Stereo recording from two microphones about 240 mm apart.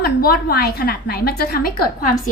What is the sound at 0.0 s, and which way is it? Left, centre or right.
A woman's voice, left.